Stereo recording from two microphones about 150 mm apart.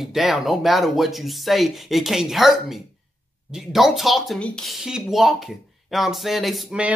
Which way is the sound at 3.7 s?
Centre (ahead or behind).